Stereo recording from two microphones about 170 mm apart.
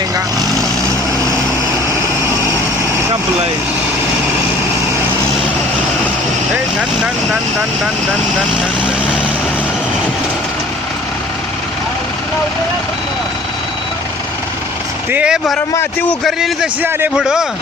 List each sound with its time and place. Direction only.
15.1 s a man's voice: 5° right (ahead or behind)
15.7 s a man's voice: 15° left (ahead or behind)
16.2 s a man's voice: 5° right (ahead or behind)